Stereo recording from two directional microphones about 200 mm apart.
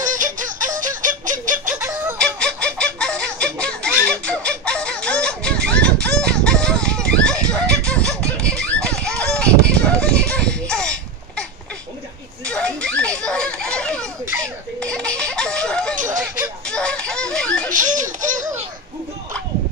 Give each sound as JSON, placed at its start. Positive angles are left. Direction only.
{"t": 0.0, "sound": "music", "side_deg": -40}
{"t": 1.7, "sound": "fowl", "side_deg": -10}
{"t": 2.1, "sound": "fowl", "side_deg": 5}
{"t": 4.1, "sound": "music", "side_deg": 5}
{"t": 6.0, "sound": "a sound", "side_deg": 5}
{"t": 8.1, "sound": "music", "side_deg": 5}
{"t": 12.4, "sound": "a sound", "side_deg": 5}
{"t": 14.8, "sound": "baby laughter", "side_deg": 5}
{"t": 17.7, "sound": "baby laughter", "side_deg": -40}